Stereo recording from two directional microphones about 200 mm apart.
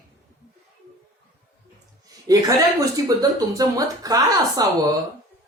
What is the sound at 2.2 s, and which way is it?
Speech, 20° right (ahead or behind).